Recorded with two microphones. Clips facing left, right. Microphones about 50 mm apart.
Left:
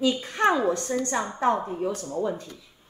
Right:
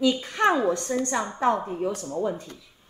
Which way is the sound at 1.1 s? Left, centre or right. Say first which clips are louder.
Even; centre.